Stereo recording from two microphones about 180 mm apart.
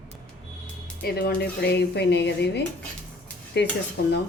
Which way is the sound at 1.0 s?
60° left (ahead or behind).